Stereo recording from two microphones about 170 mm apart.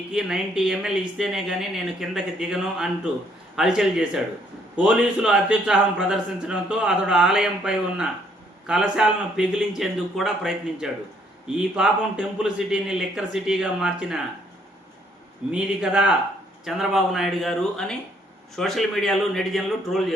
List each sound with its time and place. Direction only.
0.1 s a man's voice: 5° right (ahead or behind)
15.5 s a man's voice: 5° right (ahead or behind)